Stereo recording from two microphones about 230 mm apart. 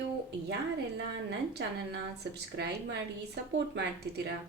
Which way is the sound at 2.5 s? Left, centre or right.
Right.